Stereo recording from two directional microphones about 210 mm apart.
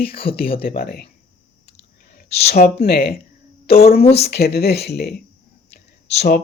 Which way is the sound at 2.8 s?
45° left (ahead or behind).